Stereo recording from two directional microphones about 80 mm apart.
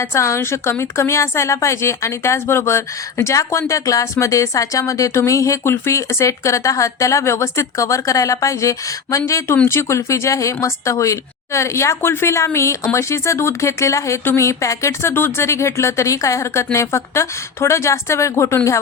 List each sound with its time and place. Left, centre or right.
0.0 s speech: left